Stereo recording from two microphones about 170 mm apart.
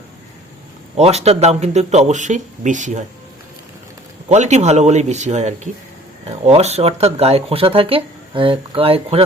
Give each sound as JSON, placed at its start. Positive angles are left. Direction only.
{"t": 0.9, "sound": "speech", "side_deg": -40}
{"t": 4.3, "sound": "speech", "side_deg": -40}